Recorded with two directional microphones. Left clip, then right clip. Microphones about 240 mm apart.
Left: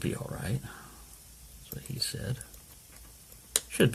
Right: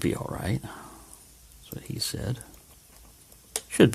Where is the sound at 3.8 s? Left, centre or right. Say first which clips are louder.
Right 7 dB; right.